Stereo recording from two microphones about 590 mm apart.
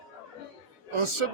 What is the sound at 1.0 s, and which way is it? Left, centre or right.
Speech, right.